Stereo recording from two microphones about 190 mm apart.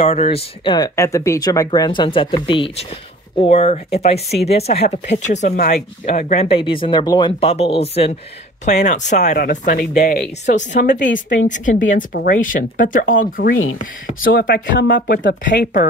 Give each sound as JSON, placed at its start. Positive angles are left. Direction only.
{"t": 0.0, "sound": "speech", "side_deg": 30}
{"t": 0.7, "sound": "speech", "side_deg": 15}
{"t": 6.4, "sound": "speech", "side_deg": 30}
{"t": 10.4, "sound": "a woman's voice", "side_deg": 40}